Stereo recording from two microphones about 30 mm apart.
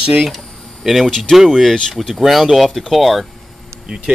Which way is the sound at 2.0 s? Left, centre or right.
Centre.